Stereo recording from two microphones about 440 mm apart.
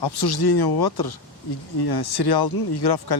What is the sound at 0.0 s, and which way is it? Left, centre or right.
Speech, left.